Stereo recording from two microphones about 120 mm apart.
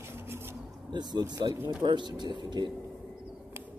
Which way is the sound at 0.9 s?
35° right (ahead or behind).